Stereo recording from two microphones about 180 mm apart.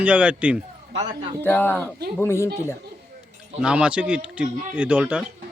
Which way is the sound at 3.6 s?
5° right (ahead or behind).